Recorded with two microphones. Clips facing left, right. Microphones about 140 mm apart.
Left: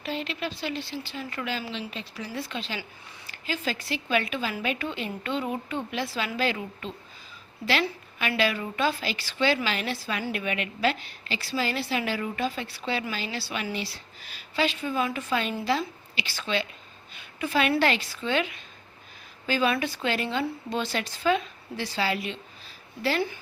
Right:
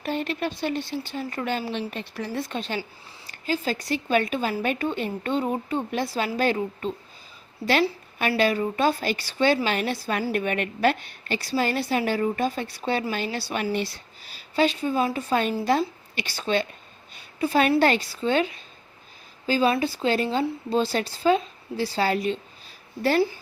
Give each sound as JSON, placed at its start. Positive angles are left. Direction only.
{"t": 0.0, "sound": "a woman's voice", "side_deg": -50}